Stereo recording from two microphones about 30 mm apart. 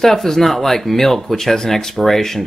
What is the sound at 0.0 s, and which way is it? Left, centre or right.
Speech, centre.